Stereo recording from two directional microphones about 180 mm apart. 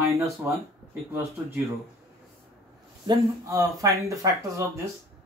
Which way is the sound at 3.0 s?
20° right (ahead or behind).